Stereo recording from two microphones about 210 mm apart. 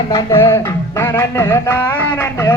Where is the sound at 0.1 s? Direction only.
15° left (ahead or behind).